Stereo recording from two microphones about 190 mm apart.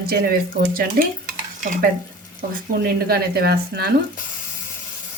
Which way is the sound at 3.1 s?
55° right (ahead or behind).